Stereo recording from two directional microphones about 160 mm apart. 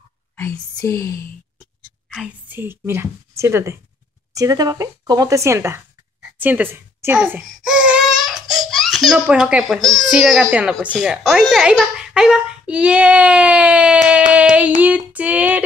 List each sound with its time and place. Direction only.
0.4 s speech: 15° left (ahead or behind)
1.6 s dog: centre (ahead or behind)
2.5 s a woman's voice: 15° right (ahead or behind)
7.4 s a sound: 5° right (ahead or behind)
8.5 s a child's voice: centre (ahead or behind)
14.0 s child singing: 5° right (ahead or behind)
14.8 s female singing: 10° right (ahead or behind)